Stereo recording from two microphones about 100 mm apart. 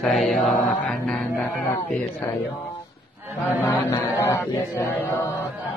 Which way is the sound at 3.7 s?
30° left (ahead or behind).